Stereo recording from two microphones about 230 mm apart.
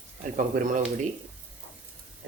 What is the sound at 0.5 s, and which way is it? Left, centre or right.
Speech, right.